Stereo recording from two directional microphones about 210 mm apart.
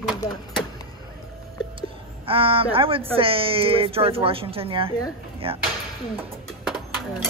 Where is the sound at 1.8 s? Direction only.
25° right (ahead or behind).